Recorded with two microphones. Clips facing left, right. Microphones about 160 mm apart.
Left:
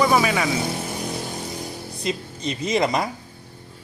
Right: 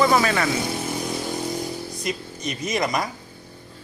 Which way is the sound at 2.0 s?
25° left (ahead or behind).